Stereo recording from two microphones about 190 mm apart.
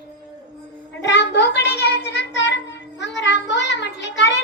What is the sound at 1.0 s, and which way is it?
Child singing, 65° left (ahead or behind).